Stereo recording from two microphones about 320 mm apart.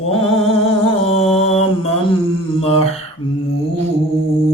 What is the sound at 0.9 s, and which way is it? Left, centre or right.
Mantra, centre.